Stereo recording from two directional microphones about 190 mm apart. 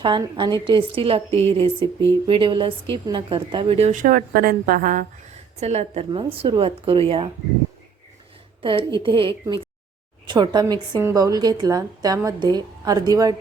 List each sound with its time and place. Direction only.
0.0 s a woman's voice: 25° right (ahead or behind)
8.6 s a woman's voice: 25° right (ahead or behind)